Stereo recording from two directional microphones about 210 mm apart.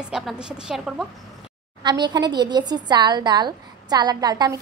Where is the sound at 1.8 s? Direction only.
20° right (ahead or behind).